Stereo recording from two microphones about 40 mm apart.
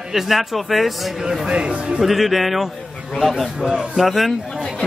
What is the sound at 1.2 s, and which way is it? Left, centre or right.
Speech, centre.